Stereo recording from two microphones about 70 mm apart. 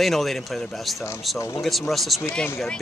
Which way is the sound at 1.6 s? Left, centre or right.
Centre.